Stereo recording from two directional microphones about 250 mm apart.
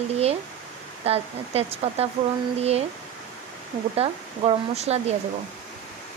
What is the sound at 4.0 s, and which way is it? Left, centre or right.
Speech, right.